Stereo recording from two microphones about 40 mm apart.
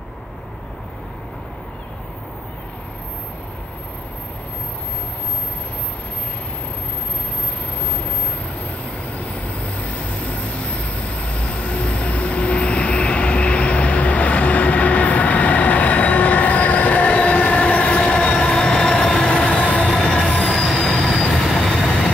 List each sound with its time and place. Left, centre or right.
10.3 s train: left
19.5 s vehicle: left
20.0 s train wheels squealing: centre
20.9 s train: centre